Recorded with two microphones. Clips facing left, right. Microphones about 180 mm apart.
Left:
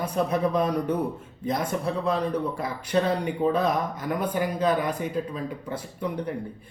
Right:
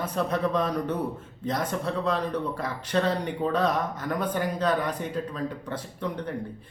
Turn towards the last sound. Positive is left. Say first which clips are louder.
# left 2 dB
turn(degrees=10)  # may be behind; listen again after turning